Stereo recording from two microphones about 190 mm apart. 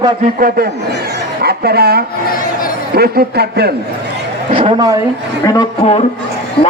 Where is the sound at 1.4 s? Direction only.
55° right (ahead or behind).